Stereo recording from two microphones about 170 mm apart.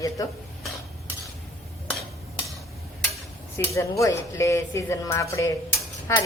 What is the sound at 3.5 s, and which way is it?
Speech, 15° left (ahead or behind).